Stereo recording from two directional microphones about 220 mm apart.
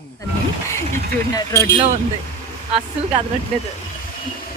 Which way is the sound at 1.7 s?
25° right (ahead or behind).